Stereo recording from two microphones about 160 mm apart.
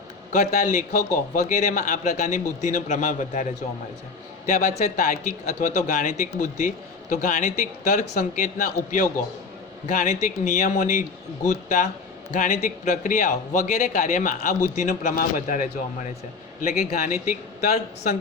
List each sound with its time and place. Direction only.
0.3 s a man's voice: 50° left (ahead or behind)
4.4 s a man's voice: 50° left (ahead or behind)